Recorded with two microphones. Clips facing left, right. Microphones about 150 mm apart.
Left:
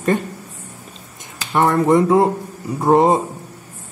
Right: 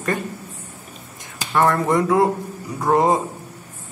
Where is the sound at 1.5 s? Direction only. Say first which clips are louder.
Left 3 dB; 25° left (ahead or behind).